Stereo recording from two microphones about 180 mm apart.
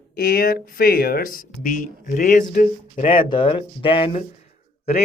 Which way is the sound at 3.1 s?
25° left (ahead or behind).